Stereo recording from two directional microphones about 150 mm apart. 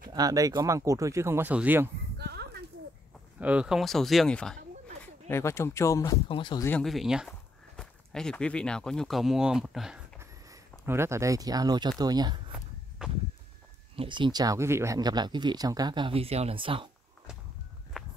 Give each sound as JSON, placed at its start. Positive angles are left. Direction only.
{"t": 0.1, "sound": "speech", "side_deg": -25}
{"t": 2.1, "sound": "a sound", "side_deg": -90}
{"t": 3.3, "sound": "speech", "side_deg": -10}
{"t": 5.0, "sound": "speech", "side_deg": 15}
{"t": 6.2, "sound": "speech", "side_deg": 35}
{"t": 6.8, "sound": "speech", "side_deg": 0}
{"t": 10.1, "sound": "a sound", "side_deg": -15}
{"t": 12.0, "sound": "speech", "side_deg": -25}
{"t": 13.0, "sound": "speech", "side_deg": -5}
{"t": 13.9, "sound": "speech", "side_deg": -30}
{"t": 17.9, "sound": "walk", "side_deg": 0}